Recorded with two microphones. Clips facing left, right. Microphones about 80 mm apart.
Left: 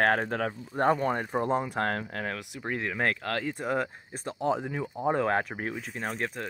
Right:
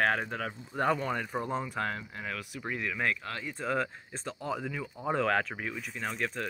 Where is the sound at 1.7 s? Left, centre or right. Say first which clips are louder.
Left 5 dB; left.